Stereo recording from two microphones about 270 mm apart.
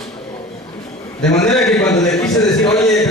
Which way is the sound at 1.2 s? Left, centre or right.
Centre.